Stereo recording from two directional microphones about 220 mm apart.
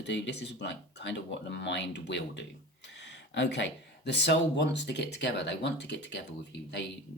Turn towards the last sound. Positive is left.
turn(degrees=55)  # may be behind; listen again after turning